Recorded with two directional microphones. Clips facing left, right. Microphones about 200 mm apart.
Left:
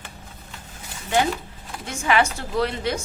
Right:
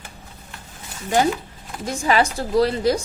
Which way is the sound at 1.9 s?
35° right (ahead or behind).